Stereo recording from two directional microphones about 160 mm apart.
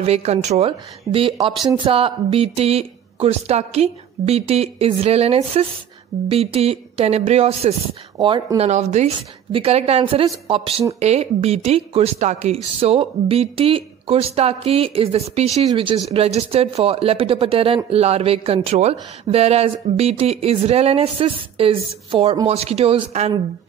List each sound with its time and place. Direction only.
0.0 s speech: 40° right (ahead or behind)
8.6 s speech: 45° right (ahead or behind)